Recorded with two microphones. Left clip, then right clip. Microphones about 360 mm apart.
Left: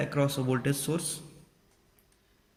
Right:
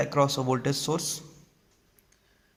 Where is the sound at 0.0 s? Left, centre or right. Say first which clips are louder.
Right 5 dB; centre.